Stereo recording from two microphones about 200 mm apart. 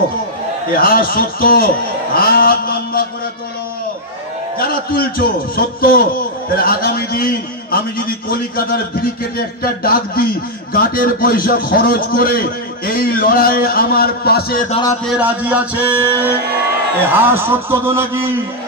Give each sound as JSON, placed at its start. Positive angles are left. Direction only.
{"t": 0.7, "sound": "a man's voice", "side_deg": 45}
{"t": 4.6, "sound": "a man's voice", "side_deg": 50}
{"t": 15.0, "sound": "a man's voice", "side_deg": -5}